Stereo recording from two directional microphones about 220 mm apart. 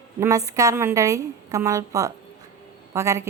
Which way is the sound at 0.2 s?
15° right (ahead or behind).